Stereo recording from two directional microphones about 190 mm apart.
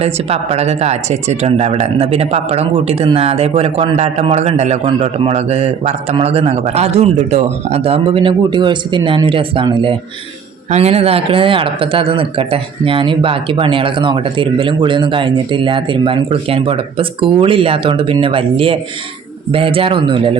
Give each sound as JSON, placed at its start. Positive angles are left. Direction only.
{"t": 0.0, "sound": "speech", "side_deg": -35}